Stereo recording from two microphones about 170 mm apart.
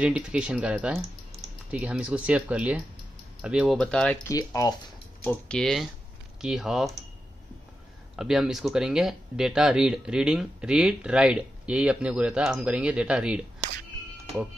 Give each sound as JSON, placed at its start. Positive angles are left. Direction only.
{"t": 0.0, "sound": "speech", "side_deg": -5}
{"t": 4.3, "sound": "speech", "side_deg": 20}
{"t": 5.2, "sound": "speech", "side_deg": 10}
{"t": 8.2, "sound": "speech", "side_deg": -5}